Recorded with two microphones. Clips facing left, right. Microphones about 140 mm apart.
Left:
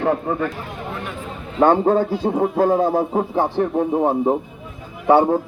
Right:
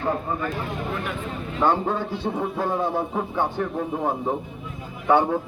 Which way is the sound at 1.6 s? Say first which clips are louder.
Left 8 dB; 50° left (ahead or behind).